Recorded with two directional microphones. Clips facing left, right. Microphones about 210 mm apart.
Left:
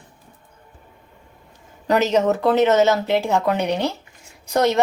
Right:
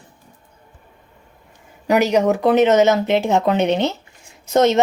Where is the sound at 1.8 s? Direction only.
10° right (ahead or behind).